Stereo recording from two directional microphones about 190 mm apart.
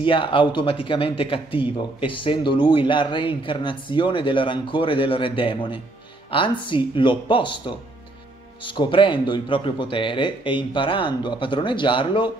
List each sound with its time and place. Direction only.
0.0 s speech: 25° left (ahead or behind)